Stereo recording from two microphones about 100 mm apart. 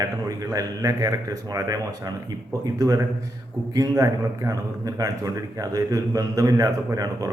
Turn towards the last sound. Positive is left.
turn(degrees=-35)  # may be behind; listen again after turning